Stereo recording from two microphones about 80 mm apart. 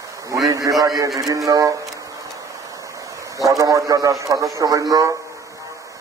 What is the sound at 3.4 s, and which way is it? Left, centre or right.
A man's voice, right.